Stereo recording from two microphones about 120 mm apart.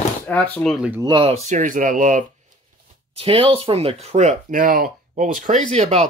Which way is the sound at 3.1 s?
50° right (ahead or behind).